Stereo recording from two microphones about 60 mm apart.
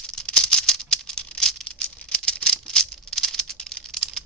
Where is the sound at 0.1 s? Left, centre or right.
Centre.